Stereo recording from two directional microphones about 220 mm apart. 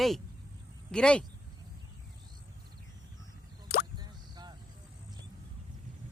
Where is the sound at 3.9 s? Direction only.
20° right (ahead or behind).